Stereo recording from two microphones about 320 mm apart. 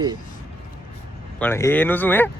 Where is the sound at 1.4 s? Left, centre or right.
Centre.